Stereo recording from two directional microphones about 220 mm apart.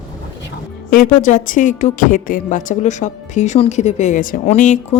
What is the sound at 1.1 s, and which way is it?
A woman's voice, 35° left (ahead or behind).